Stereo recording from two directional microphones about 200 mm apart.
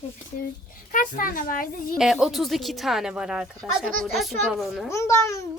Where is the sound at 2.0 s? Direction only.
Centre (ahead or behind).